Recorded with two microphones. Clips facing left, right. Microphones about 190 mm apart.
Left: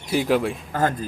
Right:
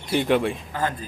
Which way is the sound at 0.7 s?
45° left (ahead or behind).